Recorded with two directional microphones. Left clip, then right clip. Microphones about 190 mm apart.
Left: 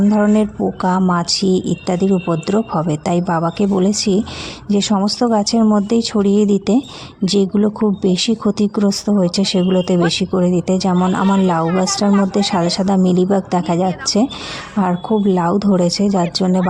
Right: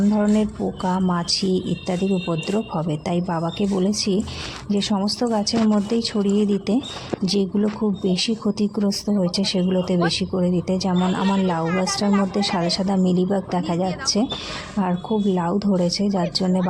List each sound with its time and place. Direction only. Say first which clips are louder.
0.1 s speech: left 6 dB; 35° left (ahead or behind)